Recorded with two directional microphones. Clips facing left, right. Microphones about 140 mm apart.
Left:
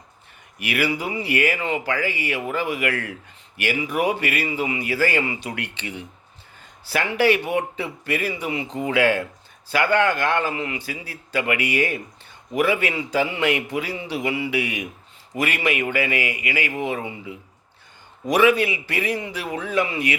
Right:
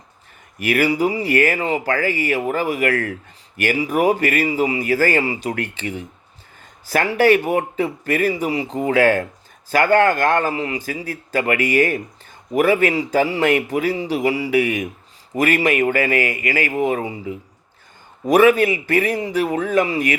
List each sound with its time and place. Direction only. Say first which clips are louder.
0.6 s speech: right 7 dB; 45° right (ahead or behind)